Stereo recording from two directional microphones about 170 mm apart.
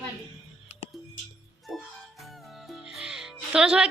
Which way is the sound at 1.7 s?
Centre (ahead or behind).